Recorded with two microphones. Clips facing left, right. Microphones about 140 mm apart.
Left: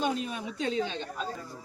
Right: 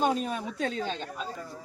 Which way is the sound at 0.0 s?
45° right (ahead or behind).